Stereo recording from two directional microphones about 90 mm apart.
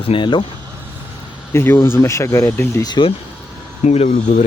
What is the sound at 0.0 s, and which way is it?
Speech, 75° left (ahead or behind).